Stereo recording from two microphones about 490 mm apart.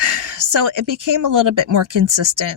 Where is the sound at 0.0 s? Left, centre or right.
Right.